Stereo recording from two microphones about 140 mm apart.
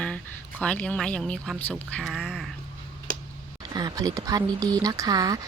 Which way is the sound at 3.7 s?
30° right (ahead or behind).